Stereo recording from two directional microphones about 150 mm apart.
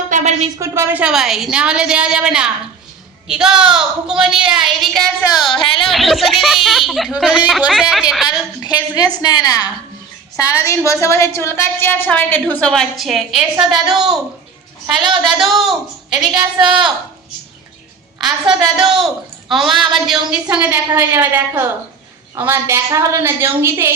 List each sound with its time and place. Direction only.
0.1 s a sound: 50° right (ahead or behind)
0.6 s a woman's voice: 15° right (ahead or behind); by 8.0 s centre (ahead or behind)
8.3 s a woman's voice: 25° left (ahead or behind); by 14.2 s centre (ahead or behind)
15.3 s a woman's voice: centre (ahead or behind)
16.3 s a woman's voice: 30° right (ahead or behind)
18.3 s a woman's voice: 5° right (ahead or behind)